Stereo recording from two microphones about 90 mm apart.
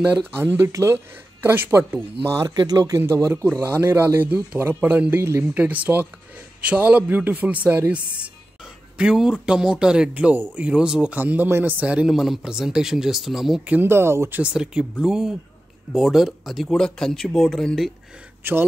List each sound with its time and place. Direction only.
0.3 s speech: 25° right (ahead or behind)
0.7 s speech: 35° right (ahead or behind)
0.9 s speech: 25° right (ahead or behind)
2.3 s speech: 50° right (ahead or behind)
3.0 s speech: 30° right (ahead or behind)
3.6 s a man's voice: 25° right (ahead or behind)
8.9 s a man's voice: 5° right (ahead or behind)
13.7 s speech: 25° right (ahead or behind)
14.4 s a man's voice: 10° right (ahead or behind)
18.4 s speech: 25° right (ahead or behind)